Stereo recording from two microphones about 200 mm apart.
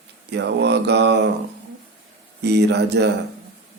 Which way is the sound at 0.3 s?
60° right (ahead or behind).